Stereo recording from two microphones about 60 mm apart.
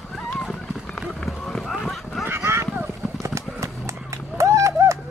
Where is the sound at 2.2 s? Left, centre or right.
Right.